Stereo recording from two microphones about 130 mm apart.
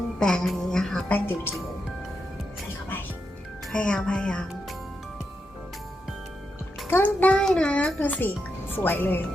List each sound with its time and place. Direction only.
0.2 s a woman's voice: 5° left (ahead or behind)
3.7 s speech: 5° left (ahead or behind)
6.8 s a child's voice: 15° left (ahead or behind)